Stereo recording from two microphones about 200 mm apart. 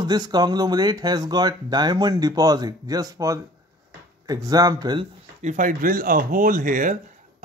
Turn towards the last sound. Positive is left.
turn(degrees=-40)  # may be behind; listen again after turning